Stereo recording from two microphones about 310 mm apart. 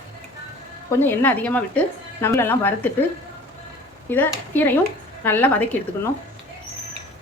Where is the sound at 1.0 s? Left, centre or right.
Centre.